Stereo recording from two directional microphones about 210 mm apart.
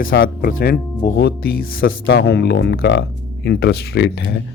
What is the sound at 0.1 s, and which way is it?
Speech, 55° left (ahead or behind).